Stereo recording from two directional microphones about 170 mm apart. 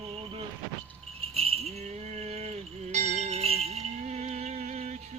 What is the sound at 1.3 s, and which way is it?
Music, 35° right (ahead or behind).